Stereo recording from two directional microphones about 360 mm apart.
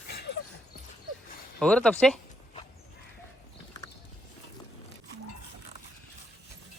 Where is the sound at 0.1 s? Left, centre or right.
Left.